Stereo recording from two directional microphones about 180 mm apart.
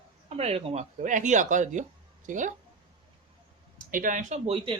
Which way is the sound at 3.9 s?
50° right (ahead or behind).